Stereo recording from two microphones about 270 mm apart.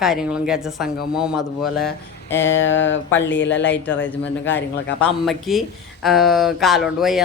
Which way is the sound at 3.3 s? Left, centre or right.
Left.